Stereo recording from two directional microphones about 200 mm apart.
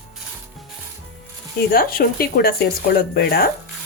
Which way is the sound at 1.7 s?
50° left (ahead or behind).